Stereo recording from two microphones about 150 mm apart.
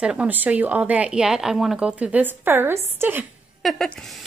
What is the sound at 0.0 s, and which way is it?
Speech, 10° right (ahead or behind).